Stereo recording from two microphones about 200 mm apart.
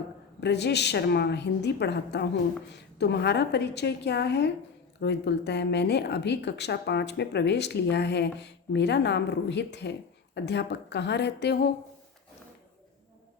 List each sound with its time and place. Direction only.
0.3 s a woman's voice: 60° left (ahead or behind)